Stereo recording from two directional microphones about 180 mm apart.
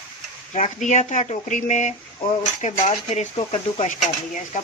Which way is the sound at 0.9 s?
40° left (ahead or behind).